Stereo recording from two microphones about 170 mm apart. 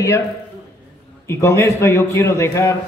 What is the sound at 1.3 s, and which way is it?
A man's voice, 15° left (ahead or behind).